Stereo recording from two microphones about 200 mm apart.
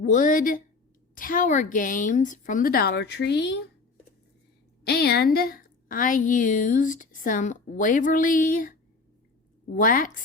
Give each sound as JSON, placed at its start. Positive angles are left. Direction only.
{"t": 0.0, "sound": "a woman's voice", "side_deg": 40}
{"t": 4.8, "sound": "a woman's voice", "side_deg": 55}